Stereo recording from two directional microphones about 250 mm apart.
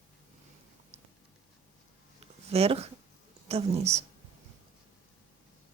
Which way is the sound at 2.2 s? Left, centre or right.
Right.